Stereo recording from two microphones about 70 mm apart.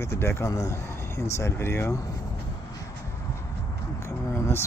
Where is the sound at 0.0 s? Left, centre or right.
Left.